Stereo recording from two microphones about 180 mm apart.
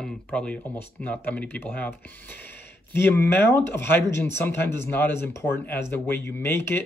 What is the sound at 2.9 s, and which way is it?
Speech, 10° left (ahead or behind).